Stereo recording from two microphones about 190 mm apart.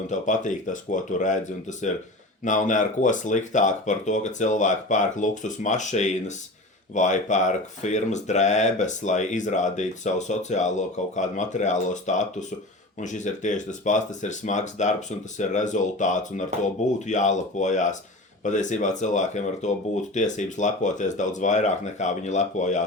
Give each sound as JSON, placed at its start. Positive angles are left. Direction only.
{"t": 0.1, "sound": "speech", "side_deg": 40}